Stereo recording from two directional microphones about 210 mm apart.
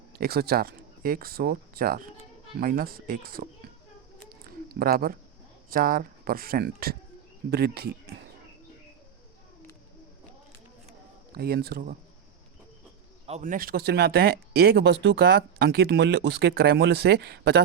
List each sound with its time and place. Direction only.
0.2 s speech: 50° right (ahead or behind)
4.3 s a sound: 45° right (ahead or behind)
5.7 s speech: 40° right (ahead or behind)
11.3 s speech: 45° right (ahead or behind)
13.2 s speech: 35° right (ahead or behind); by 17.6 s 50° right (ahead or behind)